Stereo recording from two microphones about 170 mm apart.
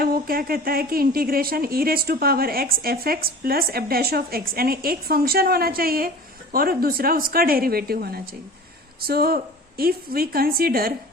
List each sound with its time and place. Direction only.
0.0 s speech: 60° right (ahead or behind)